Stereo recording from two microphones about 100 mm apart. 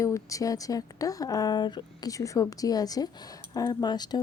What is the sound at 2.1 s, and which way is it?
Speech, 35° left (ahead or behind).